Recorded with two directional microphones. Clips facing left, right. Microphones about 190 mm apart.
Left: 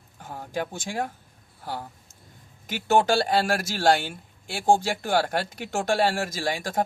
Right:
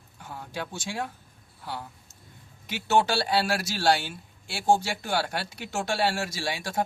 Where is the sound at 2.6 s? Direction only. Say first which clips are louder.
Left 3 dB; 50° left (ahead or behind).